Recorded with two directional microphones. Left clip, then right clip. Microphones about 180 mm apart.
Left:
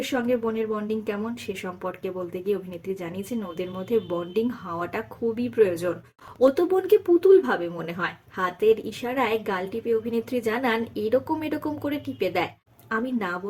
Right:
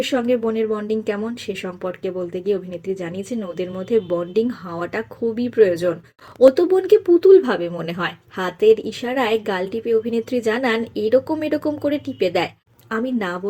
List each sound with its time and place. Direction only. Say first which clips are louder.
0.3 s a woman's voice: right 6 dB; 15° right (ahead or behind)